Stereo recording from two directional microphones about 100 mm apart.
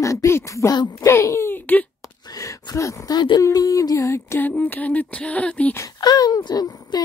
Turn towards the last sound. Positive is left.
turn(degrees=40)  # may be behind; listen again after turning